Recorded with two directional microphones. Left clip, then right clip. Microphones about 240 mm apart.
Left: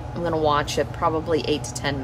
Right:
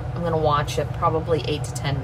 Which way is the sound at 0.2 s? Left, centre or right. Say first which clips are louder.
Even; left.